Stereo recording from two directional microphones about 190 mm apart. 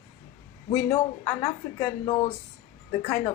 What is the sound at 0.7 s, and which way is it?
A woman's voice, 35° left (ahead or behind).